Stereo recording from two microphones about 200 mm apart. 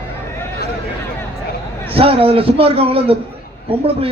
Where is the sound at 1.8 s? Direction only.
30° right (ahead or behind).